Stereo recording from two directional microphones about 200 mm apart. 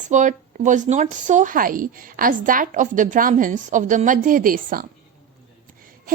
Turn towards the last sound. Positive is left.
turn(degrees=-45)  # may be behind; listen again after turning